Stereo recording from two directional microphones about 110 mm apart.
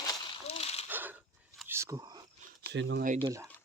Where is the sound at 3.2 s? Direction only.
30° right (ahead or behind).